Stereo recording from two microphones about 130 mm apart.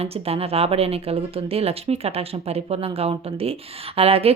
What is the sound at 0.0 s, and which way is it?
Speech, 50° right (ahead or behind).